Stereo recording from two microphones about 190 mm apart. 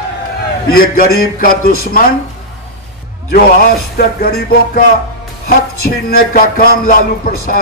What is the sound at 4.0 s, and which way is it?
Music, 55° left (ahead or behind).